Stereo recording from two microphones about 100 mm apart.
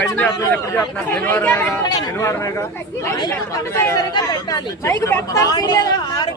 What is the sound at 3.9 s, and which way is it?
Speech, 40° left (ahead or behind).